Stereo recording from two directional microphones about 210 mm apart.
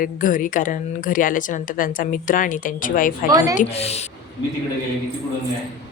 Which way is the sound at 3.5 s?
30° left (ahead or behind).